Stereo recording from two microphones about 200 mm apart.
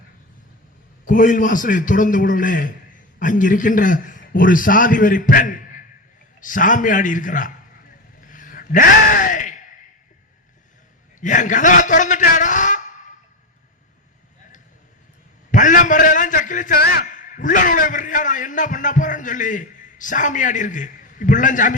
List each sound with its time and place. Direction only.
1.0 s a man's voice: 40° left (ahead or behind)
8.2 s gasp: 40° left (ahead or behind)
11.2 s a man's voice: 40° left (ahead or behind)
15.5 s a man's voice: 40° left (ahead or behind)